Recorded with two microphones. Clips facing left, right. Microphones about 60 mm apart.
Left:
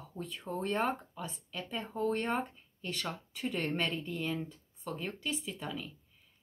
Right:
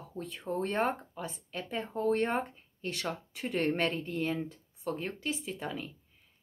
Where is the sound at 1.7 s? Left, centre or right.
Right.